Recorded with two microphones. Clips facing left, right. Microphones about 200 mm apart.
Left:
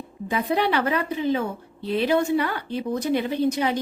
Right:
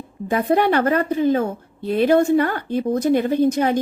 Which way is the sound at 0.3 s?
50° right (ahead or behind).